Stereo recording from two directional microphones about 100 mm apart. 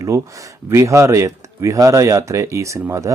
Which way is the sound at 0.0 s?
35° right (ahead or behind).